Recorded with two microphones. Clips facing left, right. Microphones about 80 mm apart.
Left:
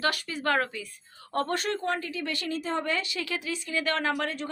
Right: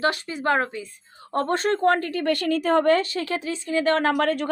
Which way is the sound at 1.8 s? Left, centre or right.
Right.